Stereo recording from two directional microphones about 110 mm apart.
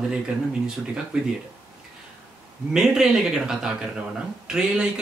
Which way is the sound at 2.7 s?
5° right (ahead or behind).